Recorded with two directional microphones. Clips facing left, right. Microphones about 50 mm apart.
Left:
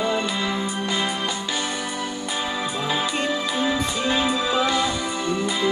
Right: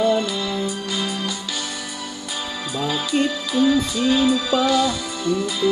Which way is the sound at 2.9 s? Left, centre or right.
Left.